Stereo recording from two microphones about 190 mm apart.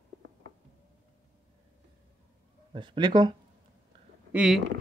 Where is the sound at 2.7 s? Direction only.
25° right (ahead or behind).